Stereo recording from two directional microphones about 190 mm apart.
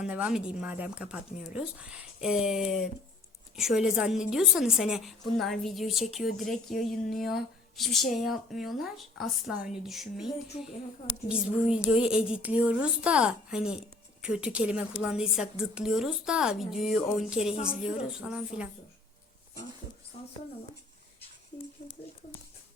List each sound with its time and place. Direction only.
0.0 s speech: 5° right (ahead or behind)